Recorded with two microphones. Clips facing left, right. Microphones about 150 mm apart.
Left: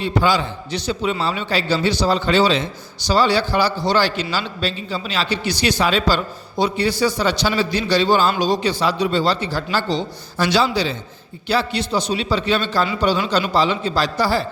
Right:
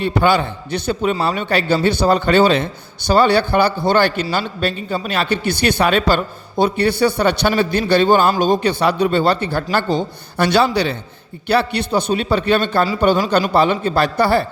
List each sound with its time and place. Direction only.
0.0 s a man's voice: 60° right (ahead or behind)